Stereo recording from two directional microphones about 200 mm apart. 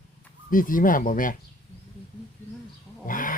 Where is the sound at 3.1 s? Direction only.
45° left (ahead or behind).